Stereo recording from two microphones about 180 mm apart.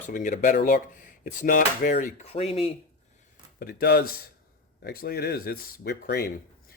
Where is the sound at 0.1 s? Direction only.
45° left (ahead or behind).